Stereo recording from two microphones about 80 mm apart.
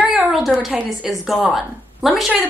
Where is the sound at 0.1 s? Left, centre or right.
Centre.